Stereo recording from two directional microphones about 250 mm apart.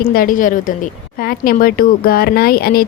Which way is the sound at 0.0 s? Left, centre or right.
Left.